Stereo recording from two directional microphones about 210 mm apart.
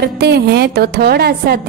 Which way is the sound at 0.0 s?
50° right (ahead or behind).